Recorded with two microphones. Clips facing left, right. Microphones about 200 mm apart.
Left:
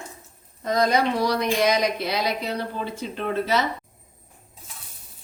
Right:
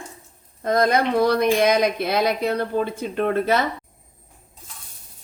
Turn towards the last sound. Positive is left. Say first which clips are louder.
# right 4 dB
turn(degrees=-55)  # may be behind; listen again after turning